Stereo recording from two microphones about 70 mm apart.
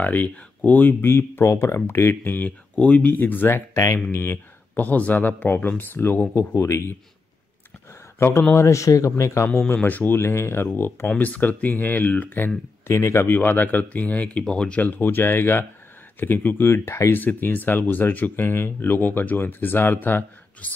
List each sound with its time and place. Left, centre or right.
0.0 s speech: left
1.0 s speech: left
2.3 s speech: left
3.7 s speech: left
4.1 s speech: left
8.2 s speech: left
9.8 s speech: left
11.1 s speech: left
12.8 s speech: left
17.1 s speech: left